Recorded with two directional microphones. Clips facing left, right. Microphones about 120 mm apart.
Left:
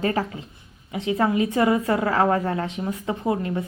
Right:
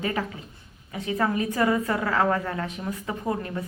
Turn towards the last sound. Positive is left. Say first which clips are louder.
# left 5 dB
turn(degrees=20)  # may be behind; listen again after turning